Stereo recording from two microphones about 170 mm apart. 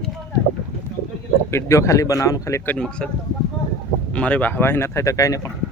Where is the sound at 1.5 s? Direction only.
15° left (ahead or behind).